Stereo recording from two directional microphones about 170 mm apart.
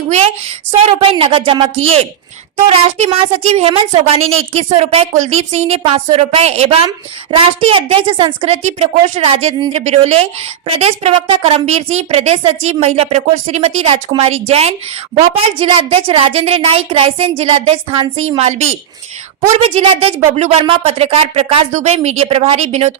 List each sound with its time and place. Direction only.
0.1 s a woman's voice: 35° right (ahead or behind)